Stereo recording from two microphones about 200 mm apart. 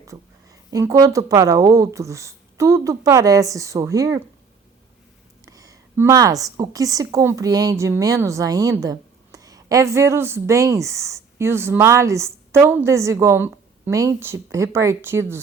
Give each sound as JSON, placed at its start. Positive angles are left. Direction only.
{"t": 0.7, "sound": "a woman's voice", "side_deg": -15}
{"t": 5.5, "sound": "a woman's voice", "side_deg": -15}